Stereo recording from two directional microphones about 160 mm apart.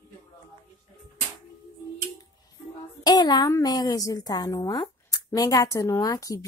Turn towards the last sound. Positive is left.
turn(degrees=20)  # may be behind; listen again after turning